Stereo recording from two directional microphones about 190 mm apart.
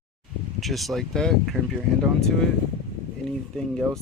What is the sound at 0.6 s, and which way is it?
Speech, centre (ahead or behind).